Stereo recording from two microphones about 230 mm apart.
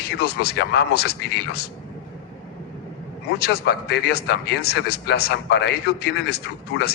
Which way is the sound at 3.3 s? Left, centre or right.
Left.